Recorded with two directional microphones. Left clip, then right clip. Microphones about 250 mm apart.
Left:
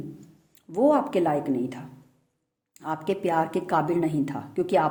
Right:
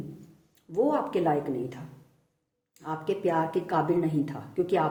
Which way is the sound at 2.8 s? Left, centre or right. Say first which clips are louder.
Left 2 dB; left.